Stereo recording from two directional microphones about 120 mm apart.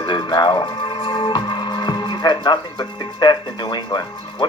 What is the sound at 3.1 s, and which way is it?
Speech, 35° left (ahead or behind).